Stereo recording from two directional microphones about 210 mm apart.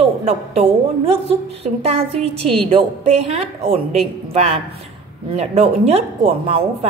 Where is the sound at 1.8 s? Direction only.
25° right (ahead or behind).